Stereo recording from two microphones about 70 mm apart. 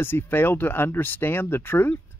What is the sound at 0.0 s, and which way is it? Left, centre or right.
Speech, left.